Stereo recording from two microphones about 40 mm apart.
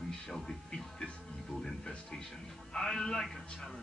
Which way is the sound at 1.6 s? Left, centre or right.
Centre.